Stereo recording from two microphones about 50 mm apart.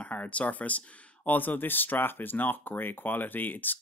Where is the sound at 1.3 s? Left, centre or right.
Left.